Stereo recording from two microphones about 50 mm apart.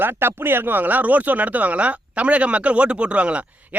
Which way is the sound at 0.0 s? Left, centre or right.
Right.